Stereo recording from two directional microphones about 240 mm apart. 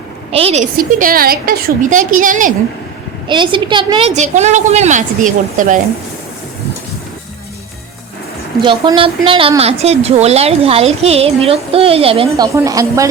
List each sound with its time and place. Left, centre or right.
0.3 s a woman's voice: right
3.2 s a woman's voice: centre
8.6 s a woman's voice: centre